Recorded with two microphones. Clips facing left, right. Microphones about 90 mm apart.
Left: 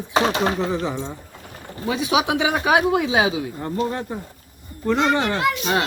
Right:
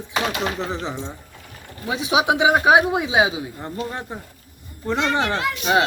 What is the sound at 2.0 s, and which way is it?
Speech, 25° right (ahead or behind).